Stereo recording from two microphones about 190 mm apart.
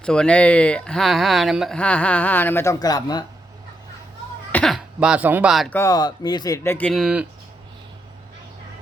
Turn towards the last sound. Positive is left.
turn(degrees=-5)  # may be behind; listen again after turning